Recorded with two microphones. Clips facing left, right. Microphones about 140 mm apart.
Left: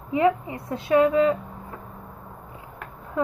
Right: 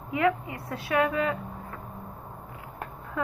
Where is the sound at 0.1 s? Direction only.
20° left (ahead or behind).